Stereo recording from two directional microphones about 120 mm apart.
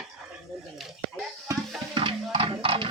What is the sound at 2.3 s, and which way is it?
Music, 50° right (ahead or behind).